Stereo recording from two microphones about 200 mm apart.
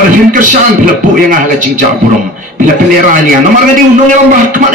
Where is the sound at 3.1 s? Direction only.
45° right (ahead or behind).